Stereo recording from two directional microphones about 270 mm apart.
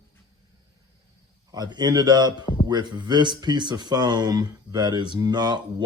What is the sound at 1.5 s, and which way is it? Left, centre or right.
Speech, centre.